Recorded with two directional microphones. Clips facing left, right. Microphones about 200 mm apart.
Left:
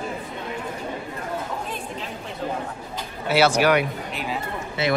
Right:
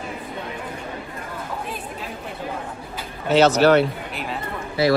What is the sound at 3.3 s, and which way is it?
Speech, 10° left (ahead or behind).